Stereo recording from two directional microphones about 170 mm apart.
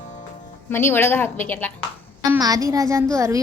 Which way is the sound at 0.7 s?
15° left (ahead or behind).